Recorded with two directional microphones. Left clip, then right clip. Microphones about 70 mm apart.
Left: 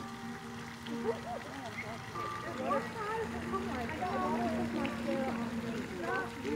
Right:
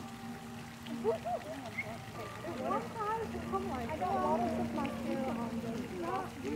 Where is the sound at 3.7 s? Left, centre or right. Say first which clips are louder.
Right 2 dB; centre.